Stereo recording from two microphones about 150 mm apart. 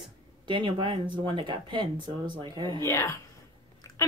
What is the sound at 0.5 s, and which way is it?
Speech, 35° right (ahead or behind).